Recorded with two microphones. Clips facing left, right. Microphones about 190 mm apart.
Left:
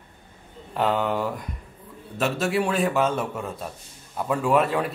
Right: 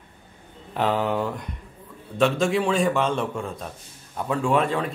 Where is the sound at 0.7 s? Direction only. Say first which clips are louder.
Even; centre (ahead or behind).